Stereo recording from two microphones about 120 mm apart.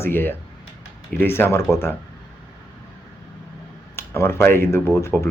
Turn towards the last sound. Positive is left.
turn(degrees=20)  # may be behind; listen again after turning